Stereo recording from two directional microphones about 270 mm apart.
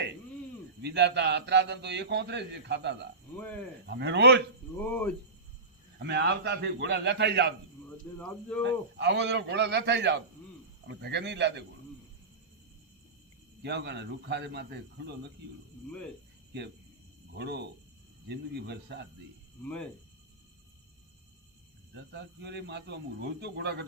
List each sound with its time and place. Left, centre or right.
0.8 s a man's voice: right
3.3 s speech: centre
3.8 s a man's voice: right
4.8 s speech: centre
6.0 s a man's voice: right
8.2 s speech: centre
8.6 s a man's voice: right
13.6 s a man's voice: right
17.3 s a man's voice: right
19.6 s speech: centre
21.9 s a man's voice: right